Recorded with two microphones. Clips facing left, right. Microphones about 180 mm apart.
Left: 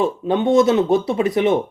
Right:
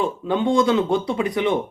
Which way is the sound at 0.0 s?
25° left (ahead or behind).